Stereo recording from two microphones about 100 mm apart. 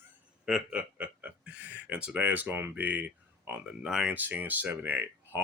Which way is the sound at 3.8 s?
5° right (ahead or behind).